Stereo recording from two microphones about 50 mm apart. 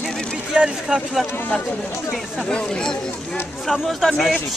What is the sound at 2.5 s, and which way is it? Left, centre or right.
Speech, centre.